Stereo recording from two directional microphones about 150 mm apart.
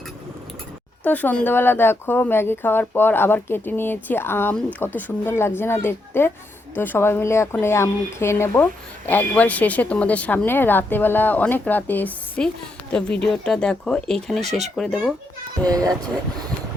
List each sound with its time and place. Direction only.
1.0 s speech: 10° left (ahead or behind)
15.6 s speech: 25° right (ahead or behind)